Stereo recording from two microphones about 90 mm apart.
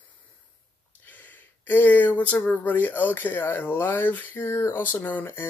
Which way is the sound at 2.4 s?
20° left (ahead or behind).